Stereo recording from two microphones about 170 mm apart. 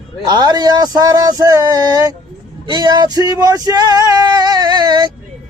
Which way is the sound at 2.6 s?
25° right (ahead or behind).